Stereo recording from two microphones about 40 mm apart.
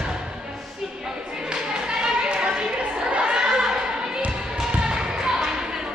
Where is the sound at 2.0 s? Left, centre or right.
Right.